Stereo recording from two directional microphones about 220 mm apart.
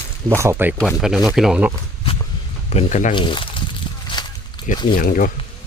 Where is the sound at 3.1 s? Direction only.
20° left (ahead or behind).